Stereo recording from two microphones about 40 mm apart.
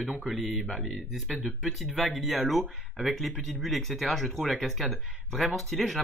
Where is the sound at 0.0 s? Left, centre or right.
Right.